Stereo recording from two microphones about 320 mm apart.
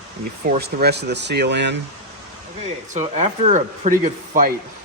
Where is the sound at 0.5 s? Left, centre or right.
Right.